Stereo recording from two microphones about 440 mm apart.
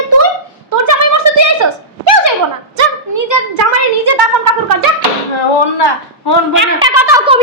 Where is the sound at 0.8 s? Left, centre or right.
Right.